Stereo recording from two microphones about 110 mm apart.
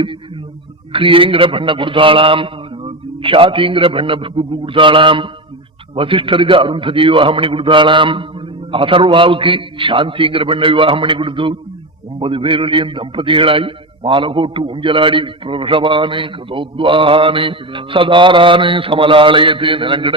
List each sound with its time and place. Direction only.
0.9 s a man's voice: 55° right (ahead or behind)